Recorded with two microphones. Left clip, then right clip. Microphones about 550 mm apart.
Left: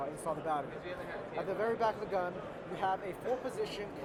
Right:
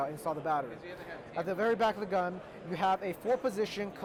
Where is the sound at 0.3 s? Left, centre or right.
Right.